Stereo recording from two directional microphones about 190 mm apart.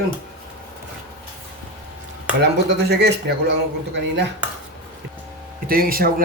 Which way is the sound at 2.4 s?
60° right (ahead or behind).